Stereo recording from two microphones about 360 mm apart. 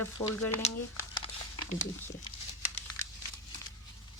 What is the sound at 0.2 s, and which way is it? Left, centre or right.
Speech, centre.